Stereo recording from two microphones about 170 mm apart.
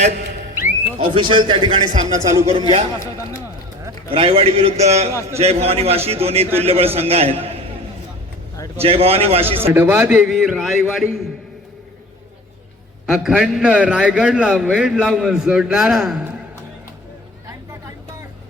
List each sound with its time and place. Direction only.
0.9 s speech: 30° right (ahead or behind)
2.5 s a man's voice: 35° right (ahead or behind)
3.0 s speech: 20° left (ahead or behind)
4.1 s a man's voice: 35° right (ahead or behind)
8.8 s a man's voice: 35° right (ahead or behind)
9.6 s a man's voice: 15° right (ahead or behind)
13.1 s a man's voice: 5° right (ahead or behind)